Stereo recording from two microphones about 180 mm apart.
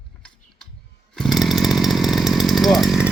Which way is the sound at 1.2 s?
Centre (ahead or behind).